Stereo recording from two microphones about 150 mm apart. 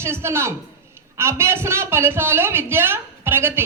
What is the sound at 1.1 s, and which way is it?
Speech, 15° right (ahead or behind).